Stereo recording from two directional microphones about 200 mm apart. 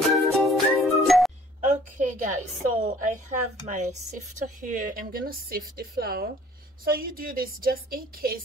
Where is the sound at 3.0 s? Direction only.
40° right (ahead or behind).